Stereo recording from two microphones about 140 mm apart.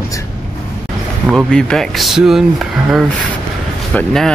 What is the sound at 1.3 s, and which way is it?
Speech, centre (ahead or behind).